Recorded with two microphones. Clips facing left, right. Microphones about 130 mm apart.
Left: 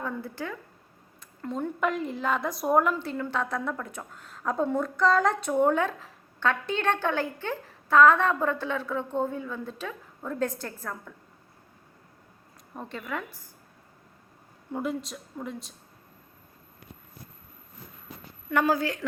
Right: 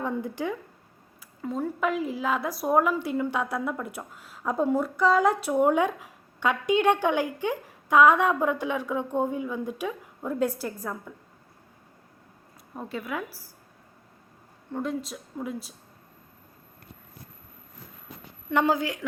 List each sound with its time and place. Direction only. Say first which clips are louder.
0.0 s speech: right 4 dB; 15° right (ahead or behind)
1.4 s a woman's voice: right 1 dB; 5° right (ahead or behind)
12.7 s a woman's voice: right 2 dB; 5° right (ahead or behind)
14.7 s a woman's voice: right 1 dB; 5° left (ahead or behind)
18.5 s a woman's voice: right 1 dB; 20° right (ahead or behind)